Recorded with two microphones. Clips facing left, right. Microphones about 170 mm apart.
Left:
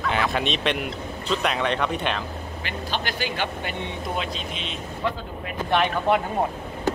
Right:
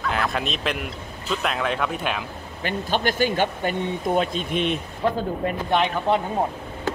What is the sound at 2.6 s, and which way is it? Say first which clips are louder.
Speech: right 7 dB; 45° right (ahead or behind).